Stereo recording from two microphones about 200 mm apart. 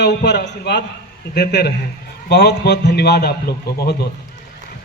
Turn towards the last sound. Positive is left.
turn(degrees=55)  # may be behind; listen again after turning